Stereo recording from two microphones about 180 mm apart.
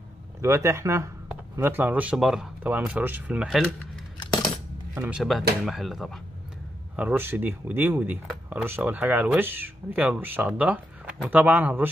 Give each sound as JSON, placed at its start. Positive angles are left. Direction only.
{"t": 0.4, "sound": "speech", "side_deg": -15}
{"t": 4.2, "sound": "coin", "side_deg": 25}
{"t": 4.9, "sound": "speech", "side_deg": -10}
{"t": 5.7, "sound": "speech", "side_deg": 0}